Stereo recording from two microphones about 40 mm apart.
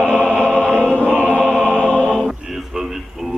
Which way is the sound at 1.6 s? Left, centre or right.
Centre.